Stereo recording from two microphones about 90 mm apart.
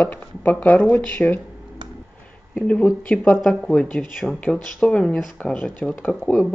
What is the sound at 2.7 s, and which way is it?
Speech, 15° left (ahead or behind).